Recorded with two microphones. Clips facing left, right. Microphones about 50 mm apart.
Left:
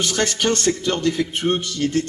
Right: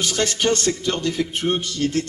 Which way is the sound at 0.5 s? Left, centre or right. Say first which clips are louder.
Left 1 dB; left.